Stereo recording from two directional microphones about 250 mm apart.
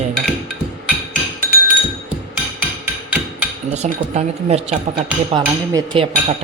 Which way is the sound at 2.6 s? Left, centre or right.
Centre.